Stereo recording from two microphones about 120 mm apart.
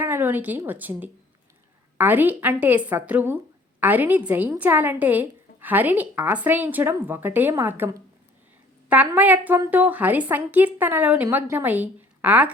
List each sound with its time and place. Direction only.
0.0 s a woman's voice: 15° right (ahead or behind)
8.9 s a woman's voice: 10° right (ahead or behind)